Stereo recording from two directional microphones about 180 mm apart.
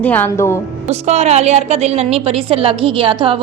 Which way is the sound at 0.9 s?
40° right (ahead or behind).